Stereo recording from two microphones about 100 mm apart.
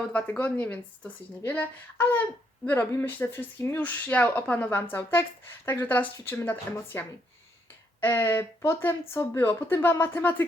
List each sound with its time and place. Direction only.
0.1 s speech: 15° left (ahead or behind)
8.0 s speech: 20° left (ahead or behind)